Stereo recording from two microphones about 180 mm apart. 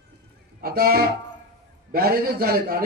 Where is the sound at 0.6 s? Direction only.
55° right (ahead or behind).